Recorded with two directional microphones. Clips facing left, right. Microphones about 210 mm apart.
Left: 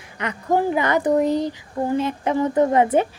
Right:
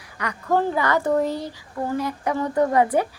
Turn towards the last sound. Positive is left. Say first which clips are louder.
# left 2 dB
turn(degrees=20)  # may be behind; listen again after turning